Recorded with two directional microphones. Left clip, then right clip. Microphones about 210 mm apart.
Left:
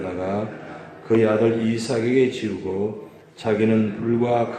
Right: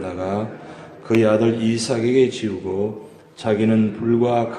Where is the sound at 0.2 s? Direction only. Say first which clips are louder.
Right 3 dB; 25° right (ahead or behind).